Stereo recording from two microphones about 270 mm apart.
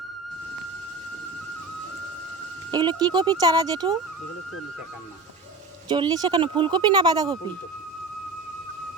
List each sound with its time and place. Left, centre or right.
2.7 s speech: centre
5.9 s speech: centre